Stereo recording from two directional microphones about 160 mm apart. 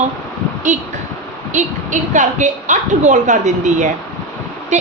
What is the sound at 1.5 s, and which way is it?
A woman's voice, 50° right (ahead or behind).